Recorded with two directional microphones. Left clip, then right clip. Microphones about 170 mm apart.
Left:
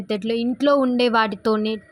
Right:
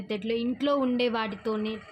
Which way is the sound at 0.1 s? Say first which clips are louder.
Left 6 dB; 45° left (ahead or behind).